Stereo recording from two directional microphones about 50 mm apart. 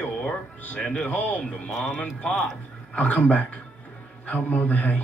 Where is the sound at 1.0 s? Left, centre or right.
Left.